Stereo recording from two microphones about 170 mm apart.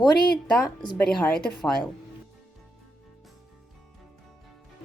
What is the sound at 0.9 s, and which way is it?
Speech, 10° left (ahead or behind).